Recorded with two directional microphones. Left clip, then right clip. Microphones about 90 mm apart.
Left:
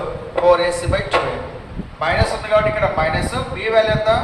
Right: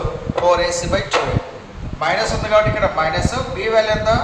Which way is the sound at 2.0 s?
40° right (ahead or behind).